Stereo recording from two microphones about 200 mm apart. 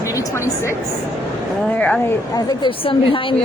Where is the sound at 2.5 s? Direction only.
25° left (ahead or behind).